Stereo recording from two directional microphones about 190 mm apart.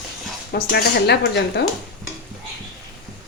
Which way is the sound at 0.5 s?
55° left (ahead or behind).